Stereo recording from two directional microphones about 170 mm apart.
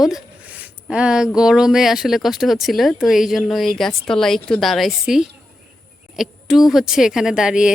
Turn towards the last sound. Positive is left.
turn(degrees=-5)  # may be behind; listen again after turning